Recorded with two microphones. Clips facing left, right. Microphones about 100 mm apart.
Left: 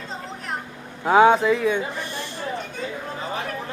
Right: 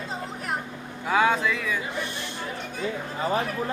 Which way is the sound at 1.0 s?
30° left (ahead or behind).